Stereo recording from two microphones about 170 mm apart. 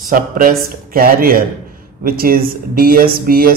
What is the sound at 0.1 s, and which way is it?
Speech, 55° right (ahead or behind).